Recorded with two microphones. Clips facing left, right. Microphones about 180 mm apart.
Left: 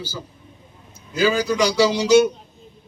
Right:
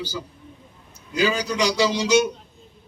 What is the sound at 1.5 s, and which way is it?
Speech, 45° left (ahead or behind).